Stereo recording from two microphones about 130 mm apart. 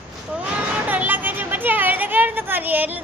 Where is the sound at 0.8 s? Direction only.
15° right (ahead or behind).